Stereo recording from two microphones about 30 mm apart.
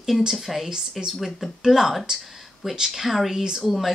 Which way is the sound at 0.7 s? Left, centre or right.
Right.